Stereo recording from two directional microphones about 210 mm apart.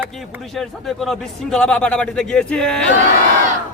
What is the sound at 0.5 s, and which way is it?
A man's voice, centre (ahead or behind).